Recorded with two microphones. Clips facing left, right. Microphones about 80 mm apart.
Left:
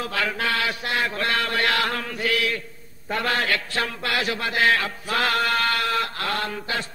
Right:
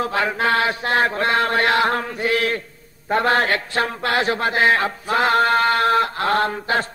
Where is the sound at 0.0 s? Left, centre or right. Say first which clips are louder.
Right 5 dB; right.